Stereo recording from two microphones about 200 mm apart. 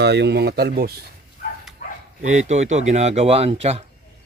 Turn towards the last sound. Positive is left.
turn(degrees=-30)  # may be behind; listen again after turning